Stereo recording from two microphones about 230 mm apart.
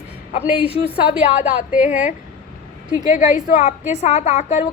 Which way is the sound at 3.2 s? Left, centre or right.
Left.